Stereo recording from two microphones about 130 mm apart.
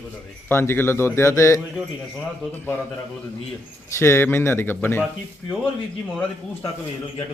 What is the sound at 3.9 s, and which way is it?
Speech, 20° left (ahead or behind).